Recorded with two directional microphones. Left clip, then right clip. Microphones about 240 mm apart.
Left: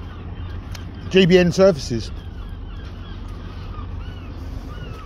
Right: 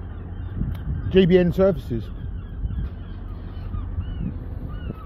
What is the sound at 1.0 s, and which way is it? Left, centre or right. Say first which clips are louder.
Speech: left 3 dB; centre.